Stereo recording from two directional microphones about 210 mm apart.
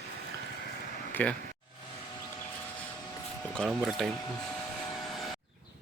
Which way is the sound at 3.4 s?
Centre (ahead or behind).